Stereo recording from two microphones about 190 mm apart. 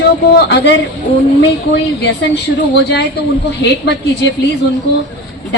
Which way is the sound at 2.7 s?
60° left (ahead or behind).